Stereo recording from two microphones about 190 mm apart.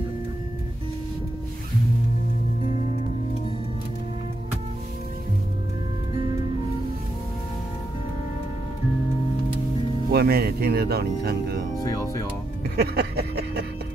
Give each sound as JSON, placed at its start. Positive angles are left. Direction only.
{"t": 10.0, "sound": "speech", "side_deg": -55}
{"t": 11.8, "sound": "speech", "side_deg": 20}
{"t": 12.7, "sound": "speech", "side_deg": -55}